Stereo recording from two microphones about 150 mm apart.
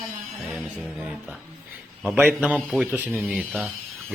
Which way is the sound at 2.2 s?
10° right (ahead or behind).